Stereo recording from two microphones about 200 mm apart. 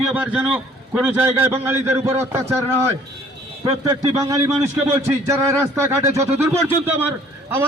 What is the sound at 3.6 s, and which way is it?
A man's voice, 20° right (ahead or behind).